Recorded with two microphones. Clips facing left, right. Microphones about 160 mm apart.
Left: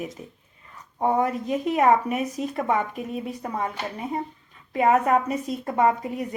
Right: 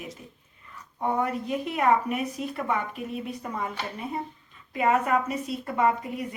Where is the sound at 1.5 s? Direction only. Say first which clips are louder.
Left 4 dB; 40° left (ahead or behind).